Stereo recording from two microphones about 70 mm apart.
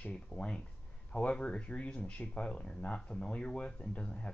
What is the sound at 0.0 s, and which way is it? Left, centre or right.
Speech, centre.